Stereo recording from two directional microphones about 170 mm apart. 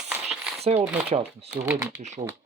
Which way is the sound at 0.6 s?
35° right (ahead or behind).